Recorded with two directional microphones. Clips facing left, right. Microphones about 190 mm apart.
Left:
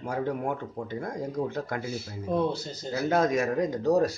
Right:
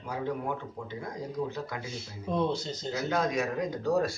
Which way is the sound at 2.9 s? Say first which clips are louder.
Left 5 dB; 45° left (ahead or behind).